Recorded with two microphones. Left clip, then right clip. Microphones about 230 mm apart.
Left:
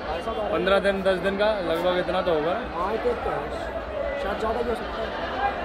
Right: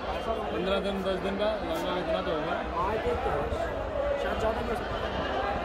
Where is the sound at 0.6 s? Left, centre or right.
Centre.